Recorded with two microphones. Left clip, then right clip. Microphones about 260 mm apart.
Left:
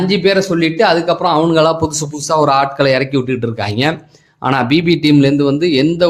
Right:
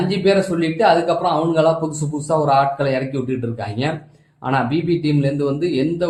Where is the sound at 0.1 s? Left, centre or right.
Left.